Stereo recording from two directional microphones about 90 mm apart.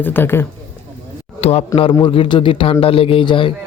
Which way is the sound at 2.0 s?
70° left (ahead or behind).